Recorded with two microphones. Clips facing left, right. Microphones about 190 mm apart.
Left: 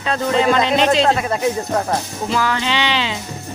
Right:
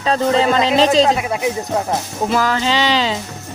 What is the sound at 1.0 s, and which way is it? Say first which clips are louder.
Speech: even; 10° right (ahead or behind).